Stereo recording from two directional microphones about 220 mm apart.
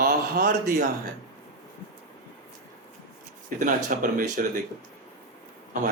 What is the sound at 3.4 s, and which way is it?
Speech, 35° right (ahead or behind).